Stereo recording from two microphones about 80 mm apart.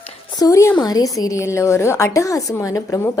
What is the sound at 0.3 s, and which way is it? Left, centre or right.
A woman's voice, left.